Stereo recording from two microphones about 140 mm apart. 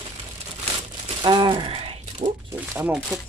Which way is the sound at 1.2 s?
35° right (ahead or behind).